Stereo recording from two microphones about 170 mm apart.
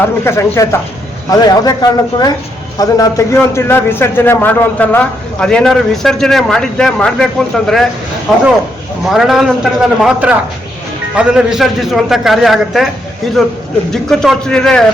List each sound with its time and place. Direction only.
0.0 s a man's voice: 15° left (ahead or behind)
9.0 s a man's voice: centre (ahead or behind)